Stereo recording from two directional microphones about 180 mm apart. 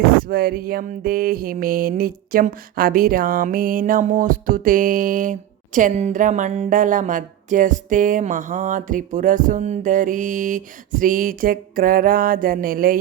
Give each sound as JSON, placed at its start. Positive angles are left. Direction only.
{"t": 0.3, "sound": "mantra", "side_deg": -55}